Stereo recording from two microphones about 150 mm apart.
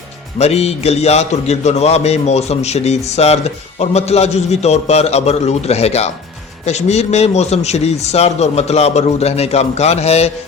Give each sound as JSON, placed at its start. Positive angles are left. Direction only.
{"t": 0.3, "sound": "a man's voice", "side_deg": 45}